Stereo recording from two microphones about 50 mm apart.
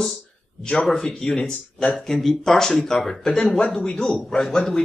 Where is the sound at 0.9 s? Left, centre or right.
Centre.